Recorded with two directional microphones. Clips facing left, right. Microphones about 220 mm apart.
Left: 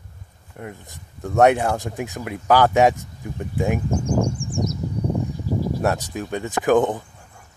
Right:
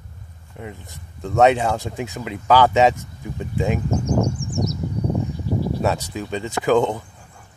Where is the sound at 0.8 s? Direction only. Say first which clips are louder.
Even; 15° left (ahead or behind).